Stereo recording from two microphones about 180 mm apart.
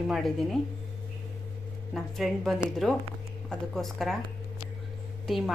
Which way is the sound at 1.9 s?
Centre (ahead or behind).